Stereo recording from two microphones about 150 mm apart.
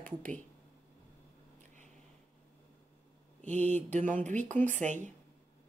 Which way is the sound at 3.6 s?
10° left (ahead or behind).